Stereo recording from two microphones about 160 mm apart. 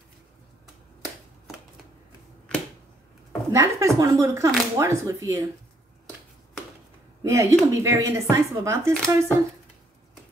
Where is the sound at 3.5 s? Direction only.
20° right (ahead or behind).